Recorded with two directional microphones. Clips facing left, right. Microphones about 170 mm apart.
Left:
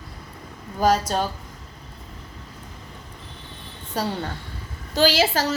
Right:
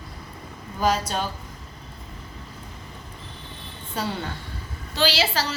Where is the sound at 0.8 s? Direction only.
40° left (ahead or behind).